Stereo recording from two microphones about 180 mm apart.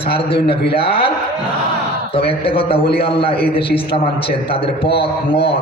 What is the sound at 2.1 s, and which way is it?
A man's voice, 30° left (ahead or behind).